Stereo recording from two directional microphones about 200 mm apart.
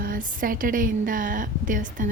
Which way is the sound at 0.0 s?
45° right (ahead or behind).